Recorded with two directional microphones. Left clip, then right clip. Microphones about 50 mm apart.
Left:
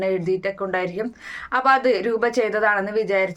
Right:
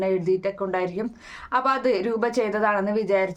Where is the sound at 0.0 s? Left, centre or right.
Right.